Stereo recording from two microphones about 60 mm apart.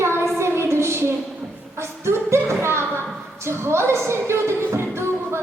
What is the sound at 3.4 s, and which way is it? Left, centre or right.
Speech, right.